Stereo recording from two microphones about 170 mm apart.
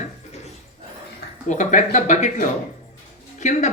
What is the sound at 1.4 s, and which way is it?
Speech, 45° left (ahead or behind).